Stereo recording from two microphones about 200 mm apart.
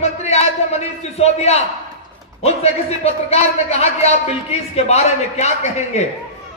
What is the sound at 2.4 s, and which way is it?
A man's voice, 30° left (ahead or behind).